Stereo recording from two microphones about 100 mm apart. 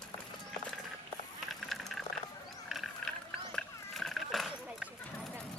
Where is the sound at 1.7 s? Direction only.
5° left (ahead or behind).